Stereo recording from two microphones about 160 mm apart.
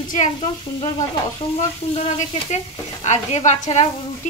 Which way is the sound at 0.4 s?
30° left (ahead or behind).